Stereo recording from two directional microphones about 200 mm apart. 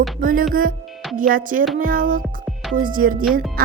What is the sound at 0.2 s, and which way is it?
Speech, 45° right (ahead or behind).